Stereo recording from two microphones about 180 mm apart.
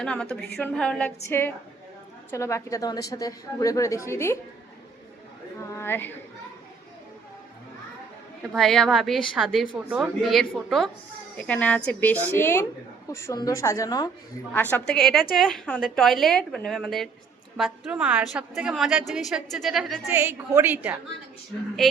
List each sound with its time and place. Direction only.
0.0 s a woman's voice: 5° left (ahead or behind)
5.7 s a sound: 10° left (ahead or behind)
8.5 s a woman's voice: 5° left (ahead or behind); by 14.1 s 20° left (ahead or behind)
14.5 s a woman's voice: 10° left (ahead or behind)
20.1 s a woman's voice: 15° right (ahead or behind)